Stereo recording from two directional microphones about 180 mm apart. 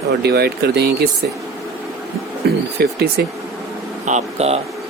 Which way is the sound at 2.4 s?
65° right (ahead or behind).